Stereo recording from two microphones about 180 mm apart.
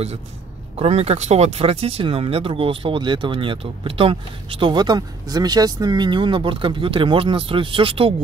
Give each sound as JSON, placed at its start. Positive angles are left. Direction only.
{"t": 0.7, "sound": "speech", "side_deg": -35}